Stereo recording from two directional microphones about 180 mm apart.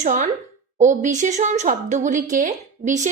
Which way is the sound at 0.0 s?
40° right (ahead or behind).